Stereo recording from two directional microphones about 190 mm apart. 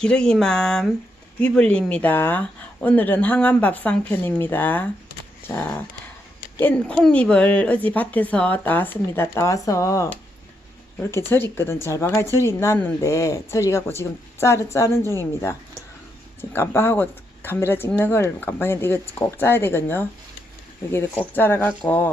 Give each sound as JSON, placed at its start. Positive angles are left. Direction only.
{"t": 0.0, "sound": "speech", "side_deg": 5}
{"t": 21.3, "sound": "speech", "side_deg": 10}